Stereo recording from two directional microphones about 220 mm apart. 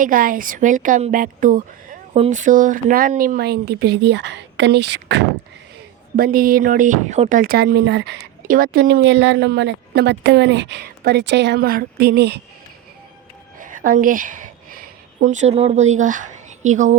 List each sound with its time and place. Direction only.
0.0 s a woman's voice: 40° right (ahead or behind)
6.1 s speech: 40° right (ahead or behind)
13.6 s a woman's voice: 35° right (ahead or behind)